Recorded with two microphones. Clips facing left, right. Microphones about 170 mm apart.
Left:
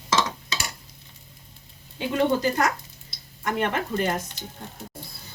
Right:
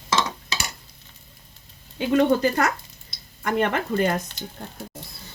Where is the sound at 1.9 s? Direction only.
65° right (ahead or behind).